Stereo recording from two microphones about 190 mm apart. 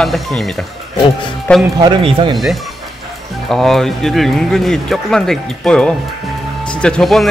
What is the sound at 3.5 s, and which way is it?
Speech, centre (ahead or behind).